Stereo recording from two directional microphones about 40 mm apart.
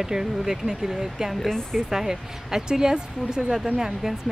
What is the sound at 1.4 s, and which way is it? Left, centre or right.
Speech, centre.